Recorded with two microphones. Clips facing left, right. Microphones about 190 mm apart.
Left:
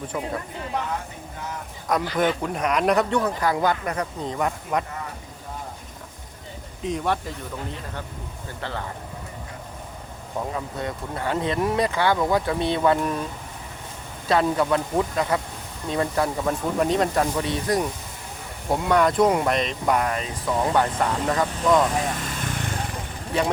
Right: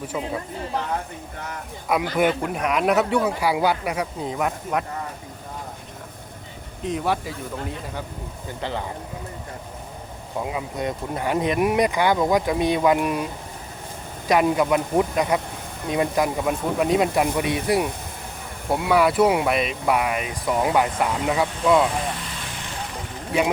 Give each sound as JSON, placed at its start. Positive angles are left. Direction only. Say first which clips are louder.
{"t": 1.9, "sound": "speech", "louder": "right 2 dB", "side_deg": -10}
{"t": 6.8, "sound": "speech", "louder": "right 1 dB", "side_deg": -5}
{"t": 8.6, "sound": "speech", "louder": "right 3 dB", "side_deg": -15}
{"t": 10.4, "sound": "speech", "louder": "right 3 dB", "side_deg": -15}
{"t": 14.3, "sound": "speech", "louder": "right 2 dB", "side_deg": -15}
{"t": 22.2, "sound": "vehicle", "louder": "left 5 dB", "side_deg": 50}